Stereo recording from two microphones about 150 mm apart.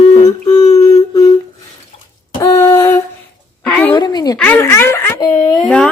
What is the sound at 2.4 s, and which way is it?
Humming, 25° left (ahead or behind).